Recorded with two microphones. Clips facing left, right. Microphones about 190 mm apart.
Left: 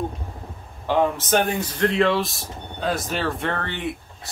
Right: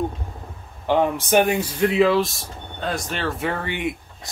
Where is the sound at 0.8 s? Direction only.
15° right (ahead or behind).